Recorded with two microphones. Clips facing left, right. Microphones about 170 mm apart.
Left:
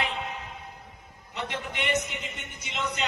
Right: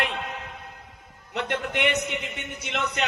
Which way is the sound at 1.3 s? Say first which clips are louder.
Right 6 dB; 65° right (ahead or behind).